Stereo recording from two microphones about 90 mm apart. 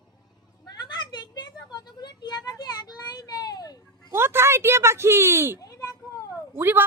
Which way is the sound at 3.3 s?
45° left (ahead or behind).